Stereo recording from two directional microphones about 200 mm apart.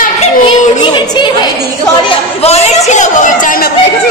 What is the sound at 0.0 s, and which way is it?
Children playing, 35° left (ahead or behind).